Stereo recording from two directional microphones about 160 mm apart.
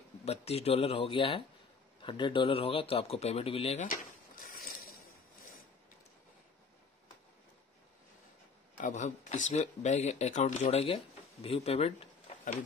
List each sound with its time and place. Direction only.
0.2 s speech: 40° left (ahead or behind)
3.8 s dishes: 60° left (ahead or behind)
8.7 s speech: 50° left (ahead or behind)